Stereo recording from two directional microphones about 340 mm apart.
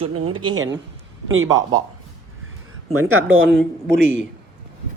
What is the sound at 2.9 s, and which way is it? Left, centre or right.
Speech, right.